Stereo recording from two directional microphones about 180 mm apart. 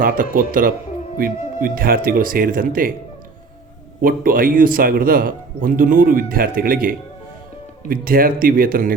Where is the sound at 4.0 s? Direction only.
50° right (ahead or behind).